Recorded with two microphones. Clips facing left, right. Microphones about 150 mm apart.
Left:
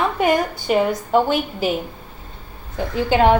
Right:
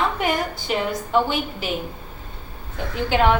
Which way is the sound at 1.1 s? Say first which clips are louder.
Left 3 dB; 45° left (ahead or behind).